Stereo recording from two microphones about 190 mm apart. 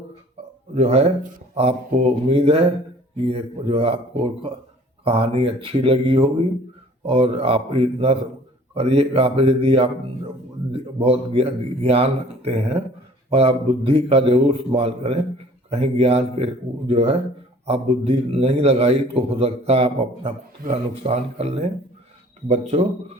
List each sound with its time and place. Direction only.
0.7 s a man's voice: 35° right (ahead or behind)